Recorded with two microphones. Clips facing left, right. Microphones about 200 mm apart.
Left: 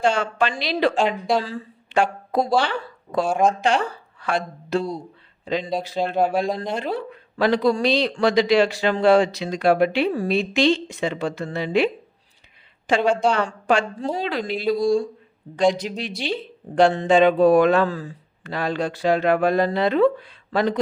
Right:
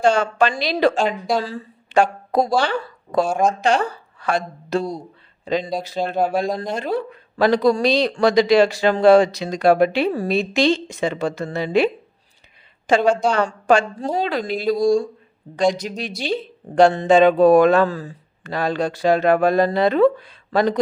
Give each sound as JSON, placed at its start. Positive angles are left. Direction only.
{"t": 0.0, "sound": "speech", "side_deg": -40}
{"t": 0.9, "sound": "speech", "side_deg": -5}
{"t": 1.5, "sound": "speech", "side_deg": -40}
{"t": 12.9, "sound": "speech", "side_deg": -40}